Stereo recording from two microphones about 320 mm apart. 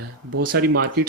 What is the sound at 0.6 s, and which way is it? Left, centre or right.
Speech, right.